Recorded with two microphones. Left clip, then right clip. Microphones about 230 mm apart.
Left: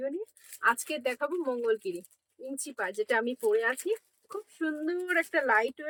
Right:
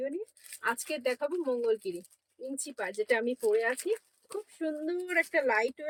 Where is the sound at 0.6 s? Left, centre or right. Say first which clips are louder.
Left 4 dB; centre.